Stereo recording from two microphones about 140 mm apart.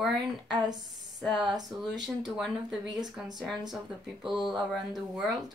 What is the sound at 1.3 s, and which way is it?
Speech, 35° right (ahead or behind).